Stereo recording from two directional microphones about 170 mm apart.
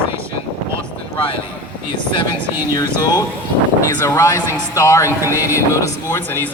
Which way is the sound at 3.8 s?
15° left (ahead or behind).